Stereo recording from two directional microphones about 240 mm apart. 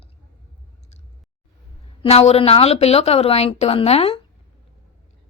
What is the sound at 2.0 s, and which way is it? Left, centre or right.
Speech, left.